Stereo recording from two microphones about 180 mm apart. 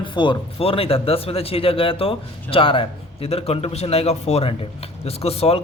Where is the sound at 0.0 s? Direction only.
25° left (ahead or behind).